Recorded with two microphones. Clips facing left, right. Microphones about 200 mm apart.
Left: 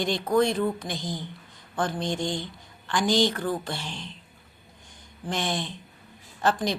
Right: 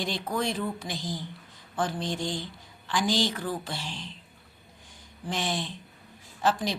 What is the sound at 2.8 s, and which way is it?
A woman's voice, 5° right (ahead or behind).